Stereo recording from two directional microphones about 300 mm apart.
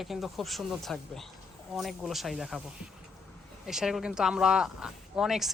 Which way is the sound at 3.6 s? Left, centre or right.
Centre.